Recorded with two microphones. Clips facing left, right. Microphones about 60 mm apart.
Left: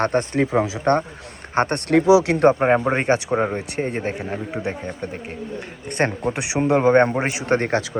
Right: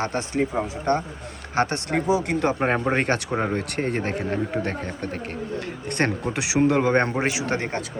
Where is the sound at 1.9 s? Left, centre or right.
Left.